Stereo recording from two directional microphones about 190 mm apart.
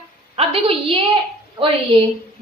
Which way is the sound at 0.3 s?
30° right (ahead or behind).